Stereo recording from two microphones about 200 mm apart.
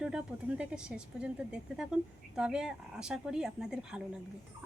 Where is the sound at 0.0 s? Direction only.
5° right (ahead or behind).